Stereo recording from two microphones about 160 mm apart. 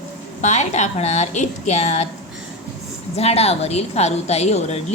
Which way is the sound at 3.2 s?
40° left (ahead or behind).